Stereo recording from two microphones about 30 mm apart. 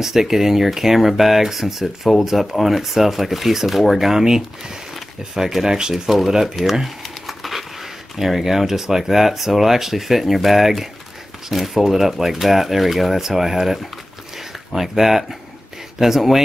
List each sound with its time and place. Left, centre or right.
0.0 s speech: centre
4.1 s speech: centre
6.0 s speech: centre
6.4 s crumpling: centre
8.2 s speech: centre
14.8 s speech: centre